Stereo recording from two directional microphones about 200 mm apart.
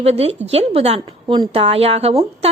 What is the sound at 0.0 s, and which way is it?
Speech, 30° right (ahead or behind).